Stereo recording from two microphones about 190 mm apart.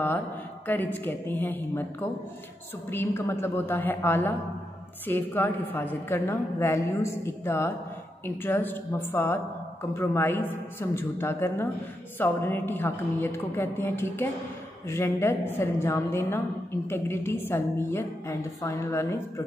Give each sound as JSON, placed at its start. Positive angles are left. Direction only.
{"t": 0.7, "sound": "speech", "side_deg": 10}